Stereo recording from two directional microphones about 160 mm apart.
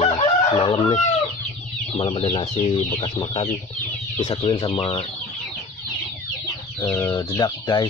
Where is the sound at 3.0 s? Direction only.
30° left (ahead or behind).